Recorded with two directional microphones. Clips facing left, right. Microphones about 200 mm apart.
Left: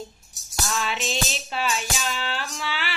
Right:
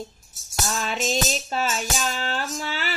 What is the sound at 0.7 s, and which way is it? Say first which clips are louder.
Music: right 2 dB; 40° right (ahead or behind).